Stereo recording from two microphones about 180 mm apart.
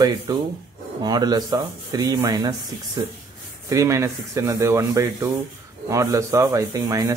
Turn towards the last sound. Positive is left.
turn(degrees=-20)  # may be behind; listen again after turning